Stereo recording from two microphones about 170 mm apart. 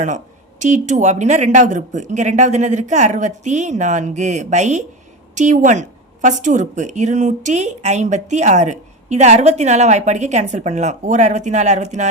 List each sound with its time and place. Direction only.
0.6 s a woman's voice: 45° right (ahead or behind)